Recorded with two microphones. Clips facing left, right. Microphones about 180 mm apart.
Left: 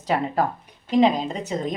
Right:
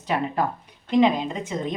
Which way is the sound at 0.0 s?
35° left (ahead or behind).